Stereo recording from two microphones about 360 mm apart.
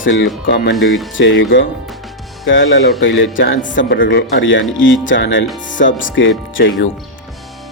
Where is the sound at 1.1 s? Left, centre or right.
Left.